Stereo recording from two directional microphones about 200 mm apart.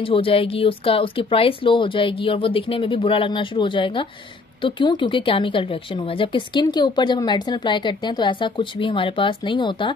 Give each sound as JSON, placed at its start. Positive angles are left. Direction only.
{"t": 0.0, "sound": "speech", "side_deg": 25}